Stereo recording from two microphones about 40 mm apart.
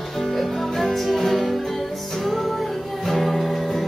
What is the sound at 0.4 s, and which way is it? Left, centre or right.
Music, centre.